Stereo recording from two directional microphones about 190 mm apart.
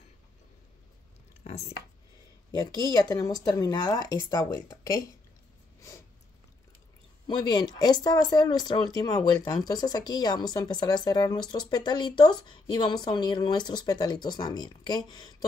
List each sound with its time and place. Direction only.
1.4 s a sound: 30° left (ahead or behind)
2.9 s speech: 20° left (ahead or behind)
5.8 s snort: 15° left (ahead or behind)
7.2 s speech: 20° left (ahead or behind)